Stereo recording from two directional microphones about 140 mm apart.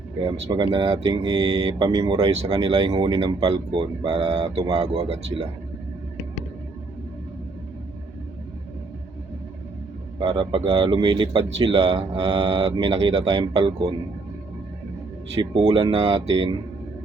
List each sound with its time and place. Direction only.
0.2 s speech: 35° right (ahead or behind)
10.2 s speech: 35° right (ahead or behind)
15.6 s speech: 30° right (ahead or behind)